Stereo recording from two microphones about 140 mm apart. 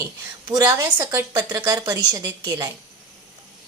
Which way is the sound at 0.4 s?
25° right (ahead or behind).